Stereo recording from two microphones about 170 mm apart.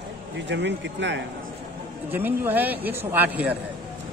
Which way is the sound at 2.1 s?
10° right (ahead or behind).